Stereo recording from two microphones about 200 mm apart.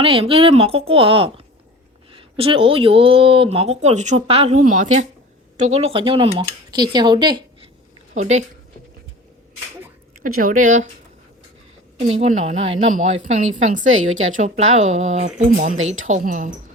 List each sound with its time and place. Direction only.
0.0 s speech: 25° right (ahead or behind)
8.1 s speech: 35° right (ahead or behind)
10.4 s speech: 40° right (ahead or behind)
12.2 s speech: 35° right (ahead or behind)